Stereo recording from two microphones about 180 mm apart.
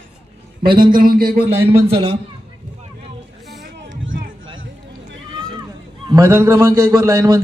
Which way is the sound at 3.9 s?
90° right.